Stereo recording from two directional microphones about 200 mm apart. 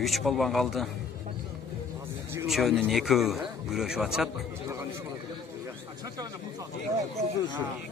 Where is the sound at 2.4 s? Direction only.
Centre (ahead or behind).